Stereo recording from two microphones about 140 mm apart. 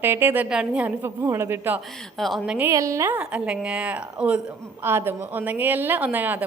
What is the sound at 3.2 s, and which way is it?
A woman's voice, 5° right (ahead or behind).